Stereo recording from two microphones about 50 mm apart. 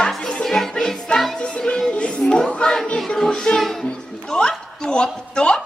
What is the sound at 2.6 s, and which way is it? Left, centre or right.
Choir, centre.